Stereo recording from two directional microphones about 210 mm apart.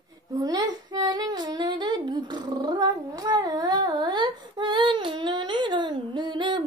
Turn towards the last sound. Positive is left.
turn(degrees=-20)  # may be behind; listen again after turning